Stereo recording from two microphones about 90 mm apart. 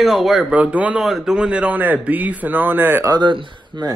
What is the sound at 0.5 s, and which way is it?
Speech, 15° right (ahead or behind).